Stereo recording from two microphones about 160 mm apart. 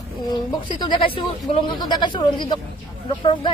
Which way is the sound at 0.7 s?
30° left (ahead or behind).